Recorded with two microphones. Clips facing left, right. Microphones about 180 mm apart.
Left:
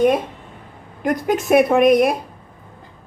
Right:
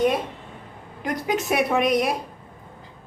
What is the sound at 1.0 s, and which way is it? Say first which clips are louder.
A woman's voice: left 6 dB; 50° left (ahead or behind).